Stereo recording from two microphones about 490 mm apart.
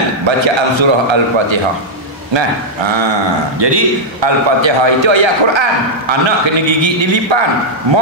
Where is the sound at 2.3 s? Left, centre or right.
Right.